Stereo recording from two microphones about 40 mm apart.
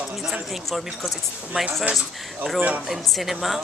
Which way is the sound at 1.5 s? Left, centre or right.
Right.